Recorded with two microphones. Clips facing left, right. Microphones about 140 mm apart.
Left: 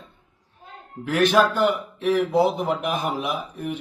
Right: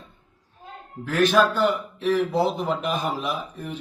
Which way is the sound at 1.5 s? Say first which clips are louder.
Left 1 dB; 15° left (ahead or behind).